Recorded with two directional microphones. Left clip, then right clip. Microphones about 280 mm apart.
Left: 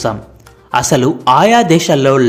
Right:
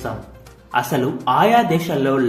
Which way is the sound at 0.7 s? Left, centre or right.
Left.